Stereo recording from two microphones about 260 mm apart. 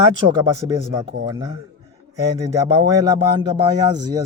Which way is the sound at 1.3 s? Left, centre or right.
Centre.